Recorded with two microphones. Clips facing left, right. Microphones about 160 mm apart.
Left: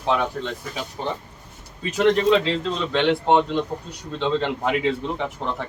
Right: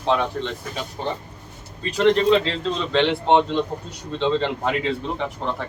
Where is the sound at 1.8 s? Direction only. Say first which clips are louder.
Right 1 dB; 10° left (ahead or behind).